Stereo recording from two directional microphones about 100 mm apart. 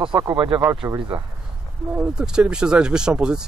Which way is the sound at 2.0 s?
10° right (ahead or behind).